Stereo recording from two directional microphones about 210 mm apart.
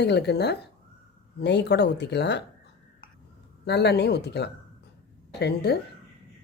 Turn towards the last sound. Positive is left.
turn(degrees=50)  # may be behind; listen again after turning